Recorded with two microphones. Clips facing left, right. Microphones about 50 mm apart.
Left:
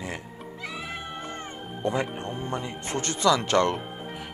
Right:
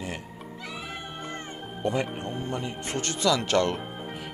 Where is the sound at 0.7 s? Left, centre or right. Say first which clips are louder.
Left 1 dB; centre.